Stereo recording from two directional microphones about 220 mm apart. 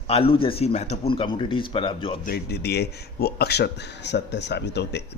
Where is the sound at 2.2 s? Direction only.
45° left (ahead or behind).